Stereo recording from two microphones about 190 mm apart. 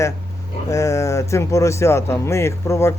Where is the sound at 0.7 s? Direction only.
15° left (ahead or behind).